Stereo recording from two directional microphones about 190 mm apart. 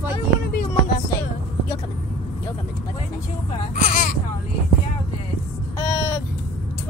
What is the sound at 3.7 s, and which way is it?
Music, 45° left (ahead or behind).